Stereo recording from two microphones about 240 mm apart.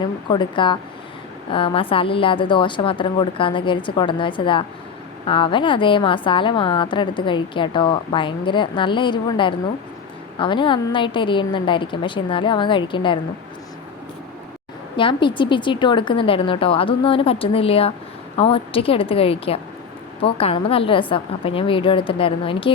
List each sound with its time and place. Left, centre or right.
0.3 s a woman's voice: centre
14.9 s a woman's voice: centre